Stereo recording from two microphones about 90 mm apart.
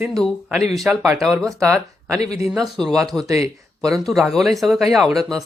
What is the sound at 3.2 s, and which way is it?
Speech, 40° right (ahead or behind).